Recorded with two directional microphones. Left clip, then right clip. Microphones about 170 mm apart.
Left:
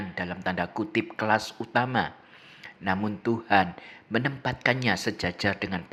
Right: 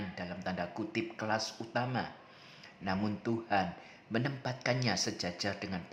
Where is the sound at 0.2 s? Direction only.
20° left (ahead or behind).